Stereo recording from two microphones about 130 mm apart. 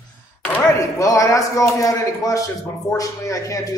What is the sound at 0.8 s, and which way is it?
A man's voice, 25° left (ahead or behind).